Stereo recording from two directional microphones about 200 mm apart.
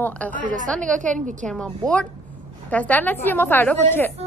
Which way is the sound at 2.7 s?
10° left (ahead or behind).